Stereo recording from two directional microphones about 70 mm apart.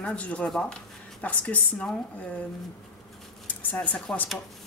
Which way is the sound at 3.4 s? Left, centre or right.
Left.